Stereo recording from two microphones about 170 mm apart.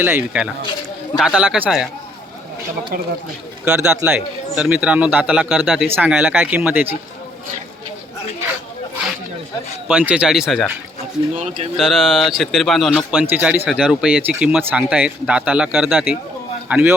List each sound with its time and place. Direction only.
0.0 s a man's voice: 10° right (ahead or behind)
3.7 s a man's voice: 15° right (ahead or behind)
9.9 s speech: 5° right (ahead or behind)
11.3 s speech: 40° right (ahead or behind)
11.8 s a man's voice: centre (ahead or behind)